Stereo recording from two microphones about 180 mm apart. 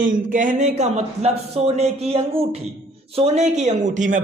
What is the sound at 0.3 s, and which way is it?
A man's voice, 45° right (ahead or behind).